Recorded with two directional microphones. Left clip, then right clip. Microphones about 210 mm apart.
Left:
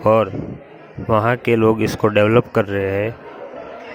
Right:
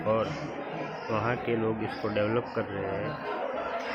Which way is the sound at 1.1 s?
50° left (ahead or behind).